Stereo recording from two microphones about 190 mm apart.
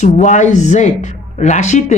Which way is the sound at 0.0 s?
40° left (ahead or behind).